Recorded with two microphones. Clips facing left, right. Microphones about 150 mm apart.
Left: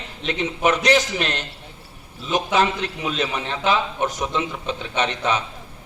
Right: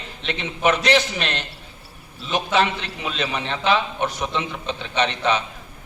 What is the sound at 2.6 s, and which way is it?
A man's voice, 40° left (ahead or behind).